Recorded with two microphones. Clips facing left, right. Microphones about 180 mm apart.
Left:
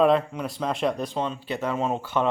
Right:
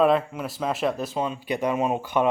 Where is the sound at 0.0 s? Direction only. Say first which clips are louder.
Even; 5° right (ahead or behind).